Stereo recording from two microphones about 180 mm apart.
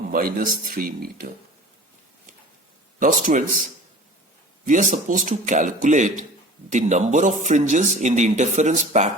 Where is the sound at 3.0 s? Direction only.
50° right (ahead or behind).